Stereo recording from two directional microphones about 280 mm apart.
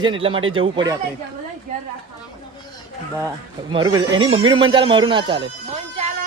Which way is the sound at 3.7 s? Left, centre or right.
Centre.